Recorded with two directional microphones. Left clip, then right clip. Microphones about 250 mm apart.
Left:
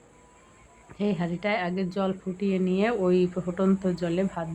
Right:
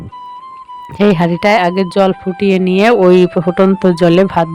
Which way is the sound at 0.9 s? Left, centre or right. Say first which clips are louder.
Right 18 dB; right.